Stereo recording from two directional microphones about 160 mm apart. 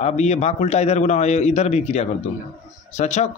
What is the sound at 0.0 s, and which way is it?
Speech, 45° left (ahead or behind).